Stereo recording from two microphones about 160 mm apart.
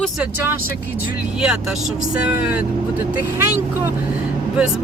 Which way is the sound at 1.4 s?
5° right (ahead or behind).